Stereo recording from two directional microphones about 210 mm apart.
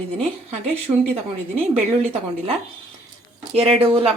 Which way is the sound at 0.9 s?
15° right (ahead or behind).